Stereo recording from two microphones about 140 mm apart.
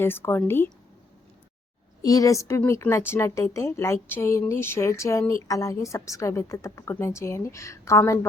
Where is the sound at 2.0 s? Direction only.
25° left (ahead or behind).